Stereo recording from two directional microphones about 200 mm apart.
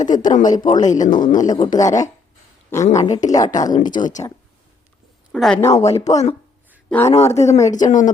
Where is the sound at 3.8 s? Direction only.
20° left (ahead or behind).